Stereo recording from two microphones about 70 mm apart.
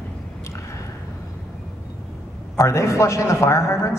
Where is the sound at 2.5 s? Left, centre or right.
Left.